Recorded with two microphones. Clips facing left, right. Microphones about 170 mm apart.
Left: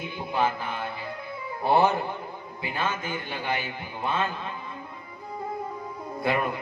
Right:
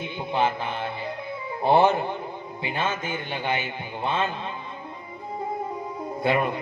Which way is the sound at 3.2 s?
30° right (ahead or behind).